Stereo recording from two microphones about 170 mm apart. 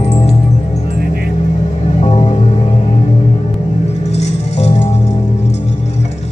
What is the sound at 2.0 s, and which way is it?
Music, 35° left (ahead or behind).